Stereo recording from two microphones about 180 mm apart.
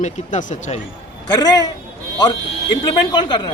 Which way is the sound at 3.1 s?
25° left (ahead or behind).